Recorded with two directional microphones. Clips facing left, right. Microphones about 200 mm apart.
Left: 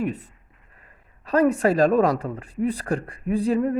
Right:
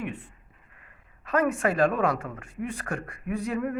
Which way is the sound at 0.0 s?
40° left (ahead or behind).